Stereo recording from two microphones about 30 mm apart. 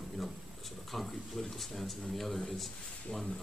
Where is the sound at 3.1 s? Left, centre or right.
Left.